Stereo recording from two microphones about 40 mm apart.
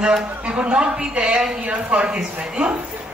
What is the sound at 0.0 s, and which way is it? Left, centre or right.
Speech, right.